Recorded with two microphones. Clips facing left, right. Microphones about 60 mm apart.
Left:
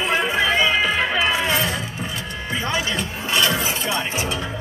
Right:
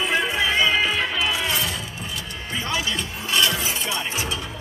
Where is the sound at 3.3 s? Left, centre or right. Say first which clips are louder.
Left 2 dB; left.